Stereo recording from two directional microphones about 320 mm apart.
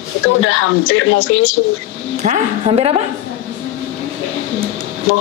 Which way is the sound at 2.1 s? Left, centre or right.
Right.